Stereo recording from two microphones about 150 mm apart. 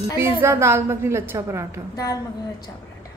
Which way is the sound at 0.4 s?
15° right (ahead or behind).